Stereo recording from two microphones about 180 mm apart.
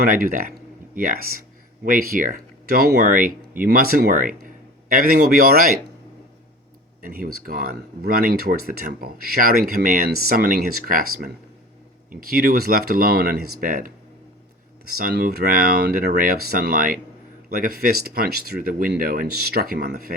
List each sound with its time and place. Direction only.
0.0 s speech: 55° right (ahead or behind)
7.1 s speech: 55° right (ahead or behind)
14.9 s speech: 60° right (ahead or behind)